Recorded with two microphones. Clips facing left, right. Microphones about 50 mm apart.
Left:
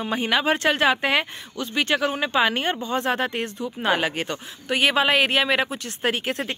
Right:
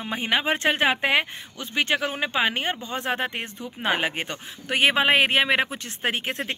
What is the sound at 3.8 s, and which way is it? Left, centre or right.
A man's voice, right.